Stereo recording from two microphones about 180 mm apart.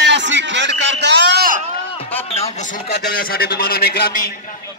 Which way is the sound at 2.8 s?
60° left (ahead or behind).